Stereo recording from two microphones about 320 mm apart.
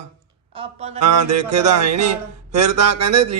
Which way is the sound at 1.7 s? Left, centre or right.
Right.